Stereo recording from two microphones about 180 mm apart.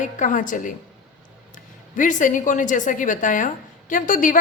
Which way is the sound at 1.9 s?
45° left (ahead or behind).